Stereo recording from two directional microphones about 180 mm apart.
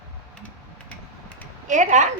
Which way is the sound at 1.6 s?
40° right (ahead or behind).